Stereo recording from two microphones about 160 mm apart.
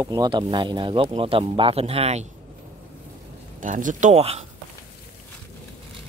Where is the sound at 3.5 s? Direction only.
55° right (ahead or behind).